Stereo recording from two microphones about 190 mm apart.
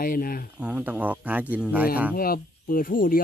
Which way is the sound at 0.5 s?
5° right (ahead or behind).